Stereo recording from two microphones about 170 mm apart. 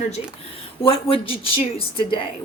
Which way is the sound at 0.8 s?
30° left (ahead or behind).